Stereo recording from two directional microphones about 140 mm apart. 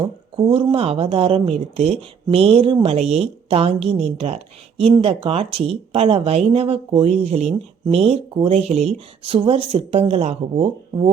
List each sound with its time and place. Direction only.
0.0 s speech: 40° right (ahead or behind)